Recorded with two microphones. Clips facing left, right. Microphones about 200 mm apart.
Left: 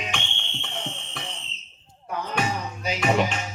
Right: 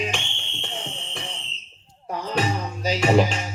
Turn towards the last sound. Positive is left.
turn(degrees=-35)  # may be behind; listen again after turning